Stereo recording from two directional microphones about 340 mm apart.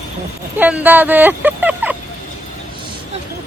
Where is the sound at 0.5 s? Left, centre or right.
Centre.